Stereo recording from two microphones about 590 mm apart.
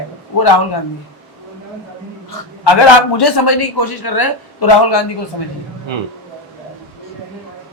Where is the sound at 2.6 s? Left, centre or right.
Left.